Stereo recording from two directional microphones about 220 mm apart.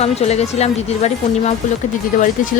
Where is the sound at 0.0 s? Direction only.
30° left (ahead or behind).